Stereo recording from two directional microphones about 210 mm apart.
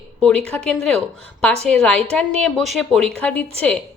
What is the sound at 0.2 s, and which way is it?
Speech, 5° left (ahead or behind).